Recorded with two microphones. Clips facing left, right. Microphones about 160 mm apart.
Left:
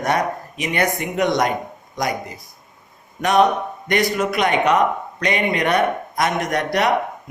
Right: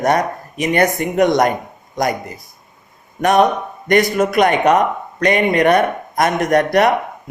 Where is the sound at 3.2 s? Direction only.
50° right (ahead or behind).